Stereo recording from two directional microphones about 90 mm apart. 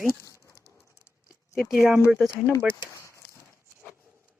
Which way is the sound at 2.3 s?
25° left (ahead or behind).